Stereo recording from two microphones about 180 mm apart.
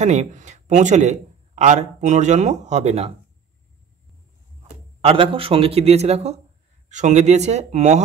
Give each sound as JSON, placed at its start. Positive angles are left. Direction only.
{"t": 0.0, "sound": "speech", "side_deg": -40}
{"t": 5.0, "sound": "speech", "side_deg": -30}